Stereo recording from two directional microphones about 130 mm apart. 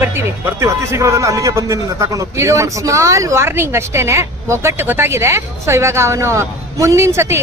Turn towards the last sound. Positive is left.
turn(degrees=-20)  # may be behind; listen again after turning